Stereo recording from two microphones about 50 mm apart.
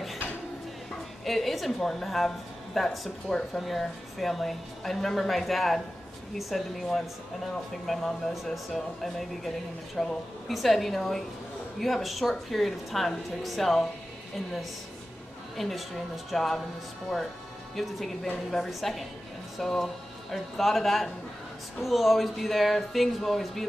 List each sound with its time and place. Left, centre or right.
1.2 s a woman's voice: centre
15.5 s a woman's voice: centre
17.7 s a woman's voice: centre